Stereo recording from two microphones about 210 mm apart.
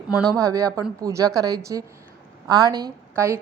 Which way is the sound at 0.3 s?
15° right (ahead or behind).